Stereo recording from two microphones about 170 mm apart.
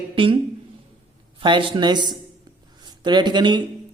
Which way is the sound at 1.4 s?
30° right (ahead or behind).